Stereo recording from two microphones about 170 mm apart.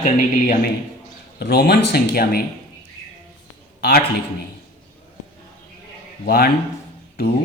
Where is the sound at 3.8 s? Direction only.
65° left (ahead or behind).